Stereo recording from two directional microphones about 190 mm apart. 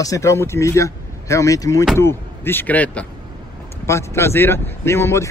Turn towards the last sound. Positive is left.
turn(degrees=15)  # may be behind; listen again after turning